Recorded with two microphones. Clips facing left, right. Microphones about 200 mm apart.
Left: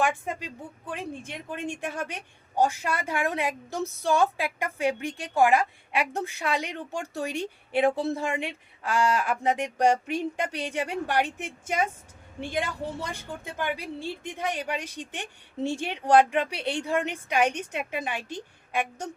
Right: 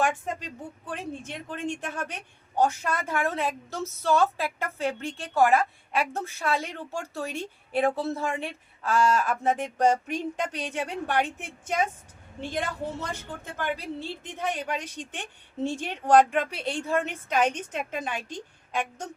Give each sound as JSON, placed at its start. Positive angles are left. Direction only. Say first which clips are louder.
{"t": 0.0, "sound": "a woman's voice", "louder": "even", "side_deg": 10}